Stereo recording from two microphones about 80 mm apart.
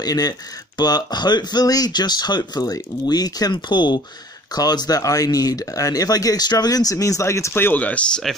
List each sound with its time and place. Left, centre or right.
0.0 s speech: left
4.5 s speech: left; by 8.1 s centre